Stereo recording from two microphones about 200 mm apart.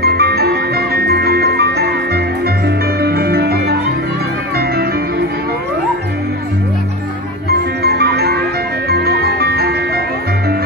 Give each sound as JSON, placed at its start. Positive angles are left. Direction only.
{"t": 0.0, "sound": "music", "side_deg": -55}
{"t": 7.8, "sound": "music", "side_deg": -55}